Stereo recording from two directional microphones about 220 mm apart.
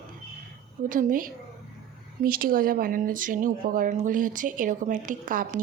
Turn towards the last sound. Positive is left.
turn(degrees=-35)  # may be behind; listen again after turning